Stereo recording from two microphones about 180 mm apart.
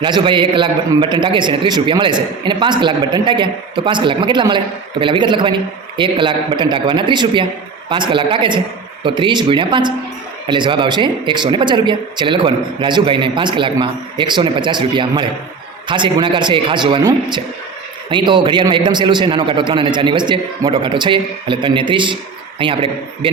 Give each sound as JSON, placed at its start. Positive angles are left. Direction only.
{"t": 0.0, "sound": "a man's voice", "side_deg": -25}